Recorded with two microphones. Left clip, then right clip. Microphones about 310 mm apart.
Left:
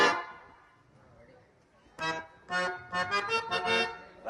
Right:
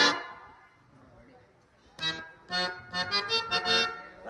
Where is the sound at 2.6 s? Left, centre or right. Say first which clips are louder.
Even; left.